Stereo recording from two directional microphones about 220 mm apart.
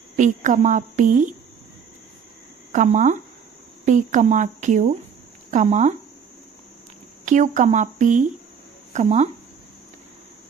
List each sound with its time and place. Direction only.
0.2 s a woman's voice: 35° right (ahead or behind)
2.7 s a woman's voice: 35° right (ahead or behind)
7.3 s a woman's voice: 35° right (ahead or behind)